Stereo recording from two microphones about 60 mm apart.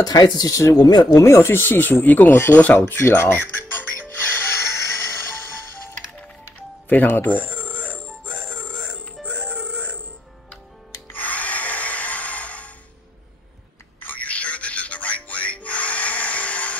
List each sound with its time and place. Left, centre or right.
0.0 s speech: left
1.2 s speech: left
4.1 s music: left
6.9 s music: left
11.1 s tools: left
14.0 s music: left